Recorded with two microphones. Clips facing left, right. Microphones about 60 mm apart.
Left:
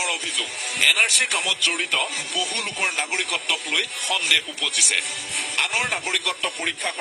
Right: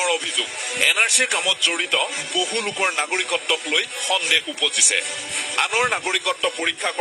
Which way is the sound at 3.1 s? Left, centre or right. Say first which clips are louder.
Right 3 dB; right.